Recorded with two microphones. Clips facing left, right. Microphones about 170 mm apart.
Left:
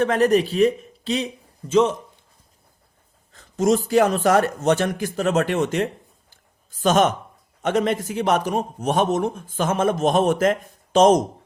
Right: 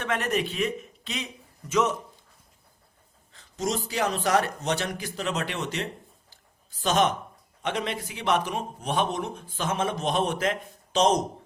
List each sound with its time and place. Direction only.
0.0 s speech: 35° left (ahead or behind)
3.3 s a man's voice: 50° left (ahead or behind)
6.3 s a sound: 50° left (ahead or behind)
7.6 s a man's voice: 45° left (ahead or behind)